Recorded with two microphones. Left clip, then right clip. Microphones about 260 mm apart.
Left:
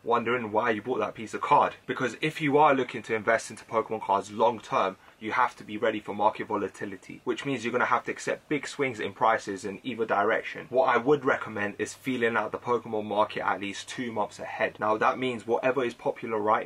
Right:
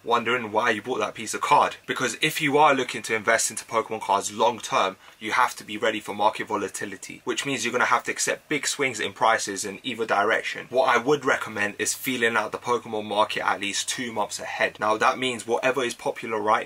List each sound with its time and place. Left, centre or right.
0.1 s speech: centre
12.4 s speech: left
13.1 s speech: centre